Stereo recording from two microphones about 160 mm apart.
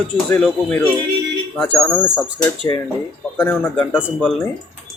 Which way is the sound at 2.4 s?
25° left (ahead or behind).